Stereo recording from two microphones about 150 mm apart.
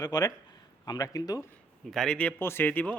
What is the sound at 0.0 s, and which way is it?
Speech, 25° left (ahead or behind).